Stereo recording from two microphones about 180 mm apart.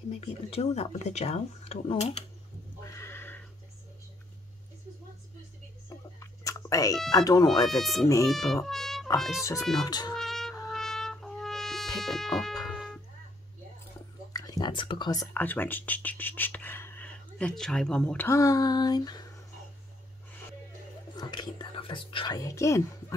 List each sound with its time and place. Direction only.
0.1 s speech: 35° left (ahead or behind)
2.8 s neigh: 15° left (ahead or behind)
5.9 s music: 20° left (ahead or behind)
7.1 s speech: 20° left (ahead or behind)
7.6 s speech: centre (ahead or behind)
8.6 s music: centre (ahead or behind)
9.4 s speech: 15° left (ahead or behind)
10.1 s music: centre (ahead or behind)
14.3 s whispering: 20° left (ahead or behind)
15.3 s speech: 10° left (ahead or behind)
21.2 s whispering: 25° left (ahead or behind)